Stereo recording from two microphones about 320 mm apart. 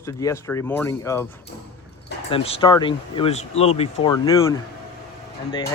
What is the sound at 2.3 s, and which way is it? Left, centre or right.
A man's voice, centre.